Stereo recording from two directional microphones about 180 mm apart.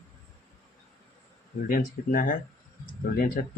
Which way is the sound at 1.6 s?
50° left (ahead or behind).